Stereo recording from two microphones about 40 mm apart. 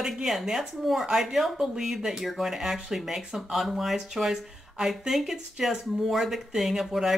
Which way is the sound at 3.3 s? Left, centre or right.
Centre.